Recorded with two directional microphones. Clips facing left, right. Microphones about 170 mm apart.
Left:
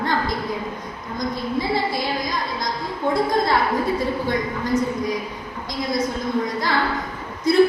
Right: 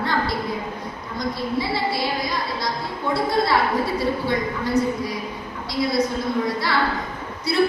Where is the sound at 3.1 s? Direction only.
45° left (ahead or behind).